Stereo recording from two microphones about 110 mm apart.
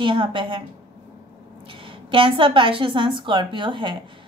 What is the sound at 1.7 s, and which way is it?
A woman's voice, 55° right (ahead or behind).